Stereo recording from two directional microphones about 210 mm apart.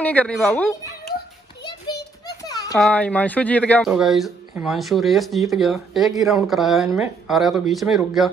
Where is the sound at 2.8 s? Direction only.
5° left (ahead or behind).